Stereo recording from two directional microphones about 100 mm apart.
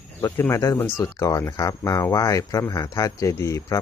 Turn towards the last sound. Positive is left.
turn(degrees=30)  # may be behind; listen again after turning